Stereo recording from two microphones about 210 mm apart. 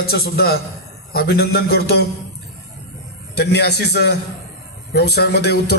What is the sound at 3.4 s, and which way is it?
A man's voice, 50° left (ahead or behind).